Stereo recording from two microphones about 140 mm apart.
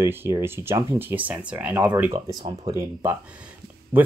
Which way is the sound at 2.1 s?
25° right (ahead or behind).